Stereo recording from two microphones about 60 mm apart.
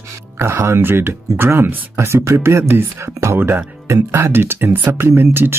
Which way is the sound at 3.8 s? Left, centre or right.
Right.